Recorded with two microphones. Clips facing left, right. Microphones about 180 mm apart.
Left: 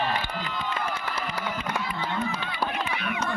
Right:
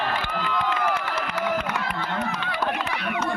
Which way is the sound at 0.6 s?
80° right.